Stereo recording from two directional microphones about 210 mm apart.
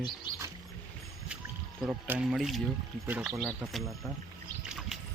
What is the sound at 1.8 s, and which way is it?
Speech, 5° right (ahead or behind).